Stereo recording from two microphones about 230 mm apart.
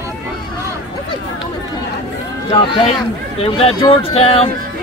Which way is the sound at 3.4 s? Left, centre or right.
Left.